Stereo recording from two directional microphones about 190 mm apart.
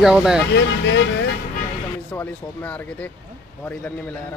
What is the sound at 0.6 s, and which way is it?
Speech, 70° left (ahead or behind).